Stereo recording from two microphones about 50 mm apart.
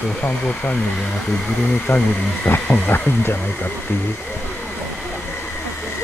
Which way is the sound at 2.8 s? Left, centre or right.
Left.